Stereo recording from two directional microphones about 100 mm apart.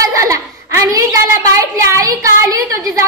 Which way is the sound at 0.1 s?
30° right (ahead or behind).